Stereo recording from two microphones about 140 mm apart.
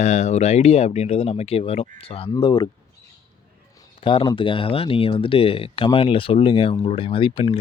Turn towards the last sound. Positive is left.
turn(degrees=40)  # may be behind; listen again after turning